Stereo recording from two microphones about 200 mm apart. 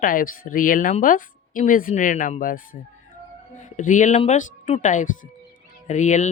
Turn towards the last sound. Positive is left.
turn(degrees=35)  # may be behind; listen again after turning